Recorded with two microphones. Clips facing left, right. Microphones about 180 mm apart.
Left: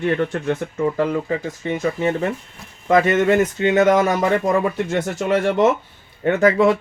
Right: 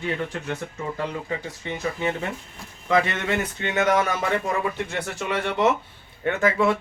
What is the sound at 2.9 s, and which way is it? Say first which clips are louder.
Speech: left 8 dB; 45° left (ahead or behind).